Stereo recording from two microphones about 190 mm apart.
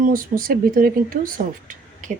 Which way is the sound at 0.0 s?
45° right (ahead or behind).